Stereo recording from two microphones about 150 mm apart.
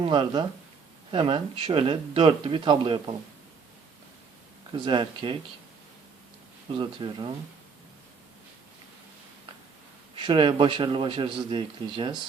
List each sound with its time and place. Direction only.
0.0 s speech: 35° right (ahead or behind)
4.7 s speech: 35° right (ahead or behind)
6.7 s speech: 30° right (ahead or behind)
10.2 s speech: 30° right (ahead or behind)